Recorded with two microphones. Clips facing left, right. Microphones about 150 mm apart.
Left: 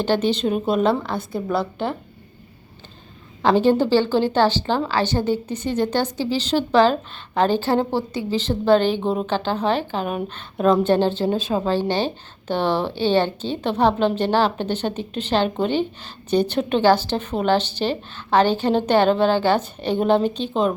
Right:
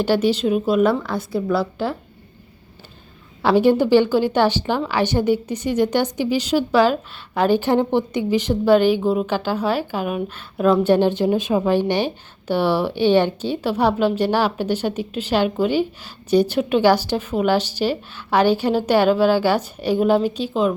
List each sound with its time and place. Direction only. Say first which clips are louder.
0.0 s a woman's voice: right 2 dB; 10° right (ahead or behind)
0.8 s a woman's voice: right 2 dB; 25° left (ahead or behind)
3.4 s a woman's voice: right 1 dB; 10° right (ahead or behind)